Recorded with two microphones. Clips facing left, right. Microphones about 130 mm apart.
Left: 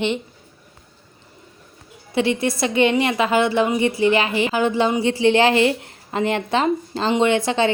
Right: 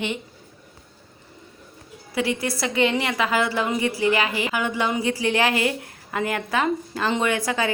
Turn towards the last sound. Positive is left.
turn(degrees=25)  # may be behind; listen again after turning